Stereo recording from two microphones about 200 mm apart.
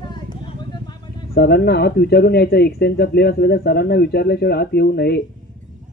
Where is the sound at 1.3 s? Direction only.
55° left (ahead or behind).